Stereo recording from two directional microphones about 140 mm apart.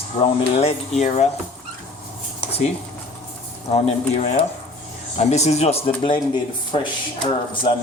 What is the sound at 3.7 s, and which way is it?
Speech, 50° left (ahead or behind).